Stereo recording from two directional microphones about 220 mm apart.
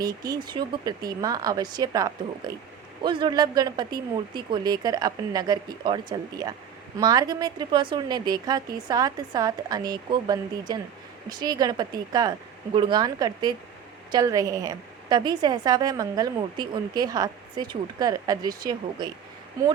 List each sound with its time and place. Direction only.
0.0 s a woman's voice: 15° right (ahead or behind)